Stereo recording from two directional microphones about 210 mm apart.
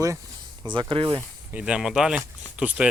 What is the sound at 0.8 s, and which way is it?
Speech, 25° right (ahead or behind).